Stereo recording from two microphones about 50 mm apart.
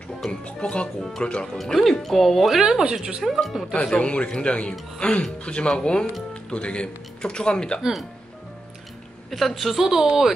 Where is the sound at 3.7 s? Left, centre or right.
Left.